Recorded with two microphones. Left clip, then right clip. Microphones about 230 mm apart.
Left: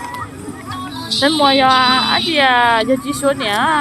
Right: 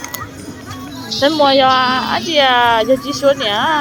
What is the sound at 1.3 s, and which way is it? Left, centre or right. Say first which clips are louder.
Speech: right 1 dB; centre.